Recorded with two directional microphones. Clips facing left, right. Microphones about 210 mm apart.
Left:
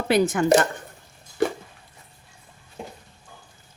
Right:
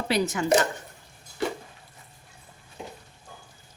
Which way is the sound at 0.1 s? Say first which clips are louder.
Left 6 dB; 55° left (ahead or behind).